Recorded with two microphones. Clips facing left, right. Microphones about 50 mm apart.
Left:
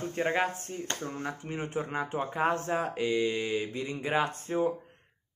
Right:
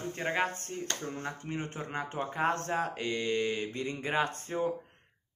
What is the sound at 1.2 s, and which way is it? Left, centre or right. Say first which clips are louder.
Speech: left 2 dB; centre.